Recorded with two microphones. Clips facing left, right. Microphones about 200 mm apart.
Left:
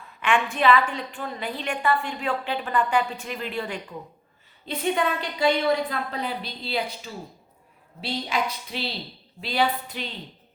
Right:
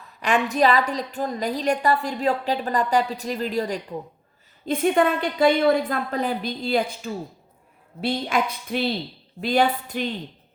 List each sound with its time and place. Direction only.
0.2 s a woman's voice: 40° right (ahead or behind)
4.6 s a woman's voice: 50° right (ahead or behind)